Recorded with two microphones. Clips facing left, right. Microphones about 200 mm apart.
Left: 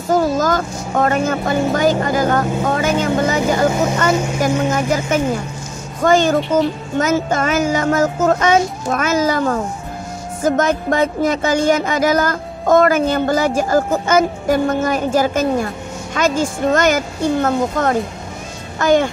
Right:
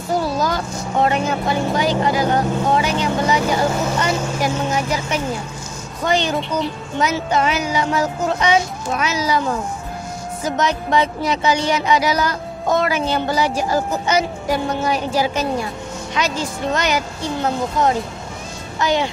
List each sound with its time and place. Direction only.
0.1 s speech: 45° left (ahead or behind)
2.6 s vehicle: 50° left (ahead or behind)
5.9 s speech: 45° left (ahead or behind)